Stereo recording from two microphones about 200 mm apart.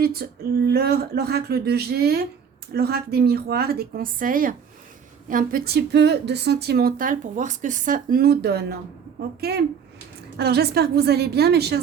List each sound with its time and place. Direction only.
0.0 s speech: 50° right (ahead or behind)